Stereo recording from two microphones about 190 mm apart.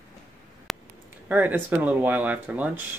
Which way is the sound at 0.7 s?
Centre (ahead or behind).